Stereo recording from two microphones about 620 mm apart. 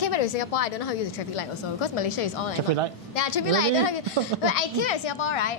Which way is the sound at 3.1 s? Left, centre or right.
Left.